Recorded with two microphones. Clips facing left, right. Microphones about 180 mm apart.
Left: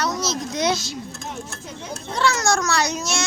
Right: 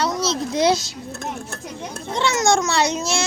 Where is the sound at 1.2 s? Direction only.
60° right (ahead or behind).